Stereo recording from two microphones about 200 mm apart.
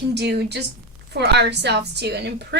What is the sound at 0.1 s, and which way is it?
A woman's voice, 55° right (ahead or behind).